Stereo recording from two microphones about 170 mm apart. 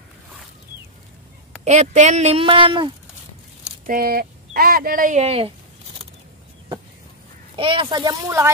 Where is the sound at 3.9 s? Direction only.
60° right (ahead or behind); by 5.5 s 35° right (ahead or behind).